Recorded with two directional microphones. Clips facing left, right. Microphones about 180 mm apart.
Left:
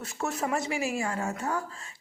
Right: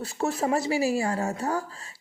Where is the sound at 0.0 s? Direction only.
35° right (ahead or behind).